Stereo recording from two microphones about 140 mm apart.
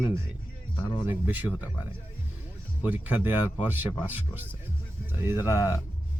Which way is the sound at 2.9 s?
10° right (ahead or behind).